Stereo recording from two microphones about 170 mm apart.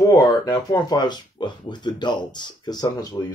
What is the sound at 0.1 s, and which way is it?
Speech, 20° left (ahead or behind).